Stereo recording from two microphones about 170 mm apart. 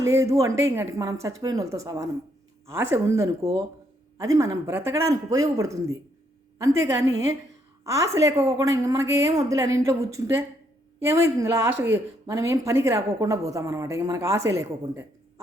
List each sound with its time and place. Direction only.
0.1 s a woman's voice: 20° right (ahead or behind)